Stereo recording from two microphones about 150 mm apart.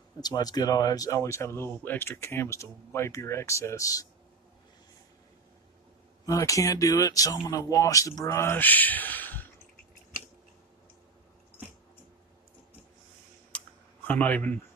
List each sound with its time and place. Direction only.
0.2 s speech: 25° left (ahead or behind)
6.2 s speech: 20° left (ahead or behind)
13.5 s a sound: 10° left (ahead or behind)
14.0 s speech: 10° left (ahead or behind)